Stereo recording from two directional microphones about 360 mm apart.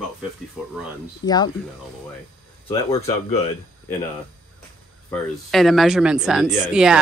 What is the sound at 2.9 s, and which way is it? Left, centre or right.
Speech, centre.